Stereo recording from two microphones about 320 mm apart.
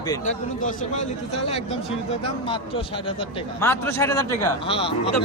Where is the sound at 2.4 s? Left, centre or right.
Centre.